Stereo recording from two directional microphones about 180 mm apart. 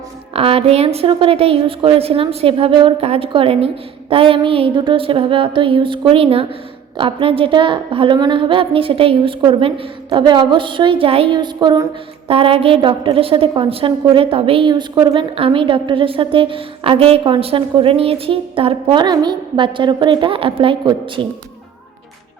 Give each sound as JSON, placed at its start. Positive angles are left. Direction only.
{"t": 0.3, "sound": "a woman's voice", "side_deg": -30}